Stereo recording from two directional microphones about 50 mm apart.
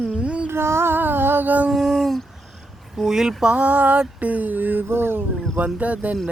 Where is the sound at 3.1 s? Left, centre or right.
Centre.